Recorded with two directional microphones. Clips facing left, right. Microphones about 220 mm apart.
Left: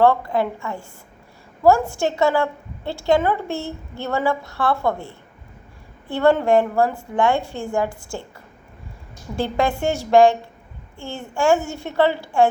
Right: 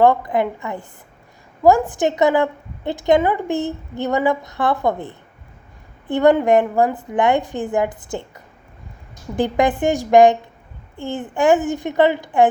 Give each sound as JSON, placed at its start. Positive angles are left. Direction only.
{"t": 0.0, "sound": "a woman's voice", "side_deg": -15}
{"t": 9.3, "sound": "a woman's voice", "side_deg": -20}